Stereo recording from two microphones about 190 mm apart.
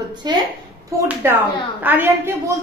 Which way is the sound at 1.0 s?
15° right (ahead or behind).